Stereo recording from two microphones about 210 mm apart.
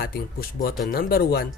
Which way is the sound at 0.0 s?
45° left (ahead or behind).